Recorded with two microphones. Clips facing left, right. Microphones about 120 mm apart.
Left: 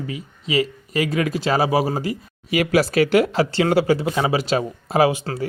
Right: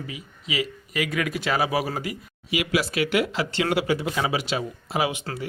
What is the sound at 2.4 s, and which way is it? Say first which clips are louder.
Speech: left 6 dB; 45° left (ahead or behind).